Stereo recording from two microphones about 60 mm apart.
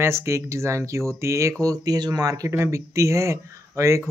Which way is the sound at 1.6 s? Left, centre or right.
Right.